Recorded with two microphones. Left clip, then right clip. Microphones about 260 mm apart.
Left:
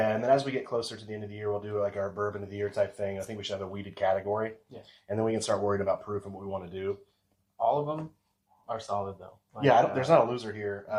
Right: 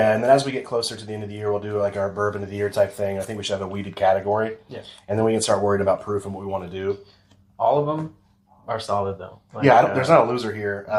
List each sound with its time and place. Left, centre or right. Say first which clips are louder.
0.0 s speech: right 8 dB; right
7.6 s speech: right 8 dB; right
9.6 s speech: right 7 dB; right